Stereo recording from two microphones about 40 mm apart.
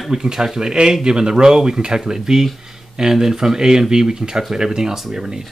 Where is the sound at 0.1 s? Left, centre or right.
Centre.